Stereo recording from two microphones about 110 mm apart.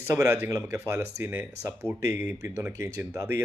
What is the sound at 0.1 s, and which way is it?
Speech, 25° right (ahead or behind).